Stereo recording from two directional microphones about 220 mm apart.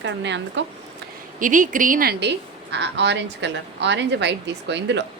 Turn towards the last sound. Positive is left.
turn(degrees=-50)  # may be behind; listen again after turning